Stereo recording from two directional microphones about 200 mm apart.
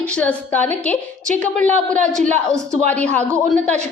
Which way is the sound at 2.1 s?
40° right (ahead or behind).